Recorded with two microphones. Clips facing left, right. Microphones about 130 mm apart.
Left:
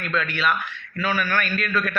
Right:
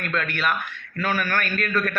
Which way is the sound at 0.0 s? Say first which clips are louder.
Left 1 dB; 50° right (ahead or behind).